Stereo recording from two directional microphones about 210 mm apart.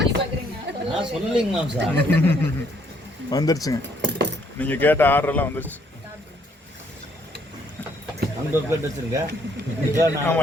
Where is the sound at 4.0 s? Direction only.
55° right (ahead or behind).